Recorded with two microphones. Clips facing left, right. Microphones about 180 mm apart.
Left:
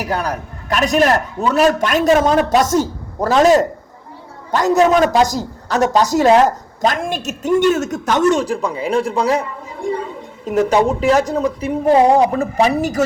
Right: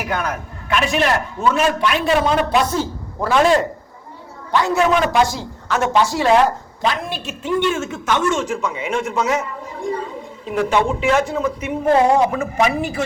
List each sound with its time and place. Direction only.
0.0 s speech: 35° left (ahead or behind)
4.5 s speech: 40° left (ahead or behind)